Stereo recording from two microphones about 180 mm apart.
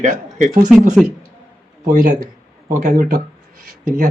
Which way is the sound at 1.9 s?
45° right (ahead or behind).